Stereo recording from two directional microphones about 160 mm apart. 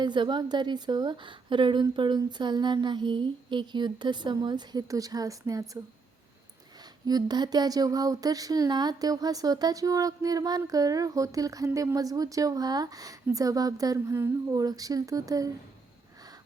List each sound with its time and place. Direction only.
0.0 s speech: 30° right (ahead or behind)
7.0 s speech: 25° right (ahead or behind)